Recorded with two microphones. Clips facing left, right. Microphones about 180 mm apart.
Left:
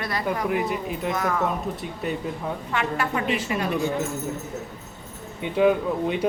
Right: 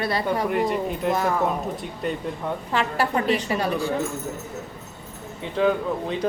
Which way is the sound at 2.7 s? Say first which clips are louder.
Right 3 dB; 35° right (ahead or behind).